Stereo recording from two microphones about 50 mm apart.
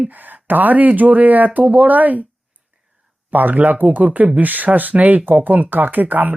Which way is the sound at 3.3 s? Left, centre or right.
Right.